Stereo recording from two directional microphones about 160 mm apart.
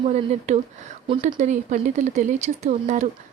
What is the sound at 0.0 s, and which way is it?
Speech, 40° right (ahead or behind).